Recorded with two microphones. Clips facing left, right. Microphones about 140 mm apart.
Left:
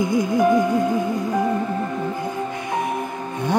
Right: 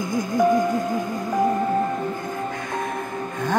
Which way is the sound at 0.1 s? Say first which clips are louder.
Left 5 dB; 45° right (ahead or behind).